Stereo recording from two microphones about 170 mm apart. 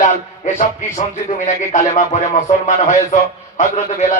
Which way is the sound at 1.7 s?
45° left (ahead or behind).